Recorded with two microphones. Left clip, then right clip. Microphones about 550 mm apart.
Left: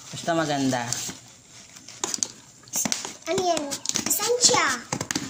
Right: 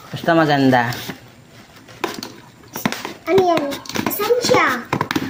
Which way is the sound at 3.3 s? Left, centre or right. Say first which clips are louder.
Right 9 dB; left.